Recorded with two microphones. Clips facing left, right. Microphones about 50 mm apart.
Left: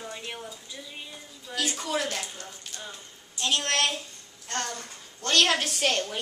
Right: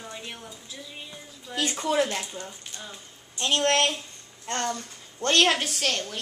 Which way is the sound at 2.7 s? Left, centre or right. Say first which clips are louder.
Left 3 dB; right.